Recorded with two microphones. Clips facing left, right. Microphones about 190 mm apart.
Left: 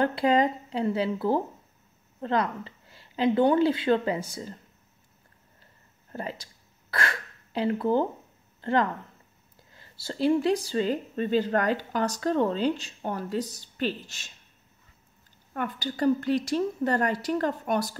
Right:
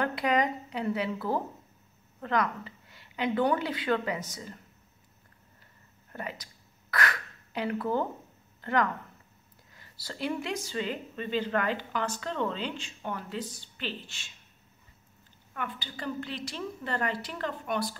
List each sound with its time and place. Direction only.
0.0 s a woman's voice: 30° left (ahead or behind)
6.1 s throat clearing: 30° left (ahead or behind)
8.5 s speech: 30° left (ahead or behind)
15.5 s a woman's voice: 40° left (ahead or behind)